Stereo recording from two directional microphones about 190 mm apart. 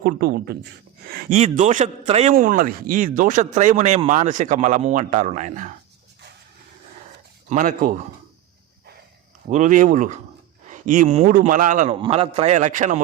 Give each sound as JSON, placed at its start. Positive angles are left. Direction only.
{"t": 0.0, "sound": "a man's voice", "side_deg": -55}
{"t": 1.4, "sound": "speech", "side_deg": -40}
{"t": 2.3, "sound": "speech", "side_deg": -45}
{"t": 7.5, "sound": "a man's voice", "side_deg": -45}
{"t": 9.5, "sound": "a man's voice", "side_deg": -40}
{"t": 11.9, "sound": "speech", "side_deg": -25}